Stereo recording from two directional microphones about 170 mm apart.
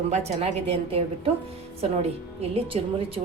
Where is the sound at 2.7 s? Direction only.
40° right (ahead or behind).